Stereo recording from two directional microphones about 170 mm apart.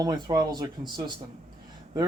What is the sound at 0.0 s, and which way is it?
Speech, 25° right (ahead or behind).